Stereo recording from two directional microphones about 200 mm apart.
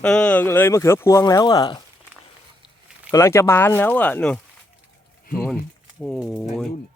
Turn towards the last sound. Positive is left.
turn(degrees=0)  # may be behind; listen again after turning